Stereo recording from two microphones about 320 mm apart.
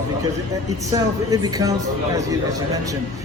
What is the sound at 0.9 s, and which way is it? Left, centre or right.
Speech, centre.